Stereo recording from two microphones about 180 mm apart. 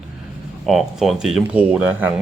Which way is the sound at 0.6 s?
Centre (ahead or behind).